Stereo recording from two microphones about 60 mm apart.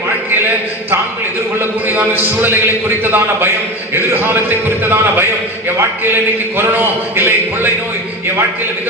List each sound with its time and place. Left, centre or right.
1.9 s a man's voice: right
6.6 s a man's voice: right